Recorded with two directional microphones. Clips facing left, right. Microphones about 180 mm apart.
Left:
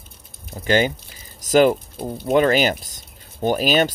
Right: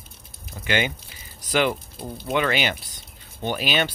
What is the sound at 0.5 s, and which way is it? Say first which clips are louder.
Speech: left 6 dB; 40° left (ahead or behind).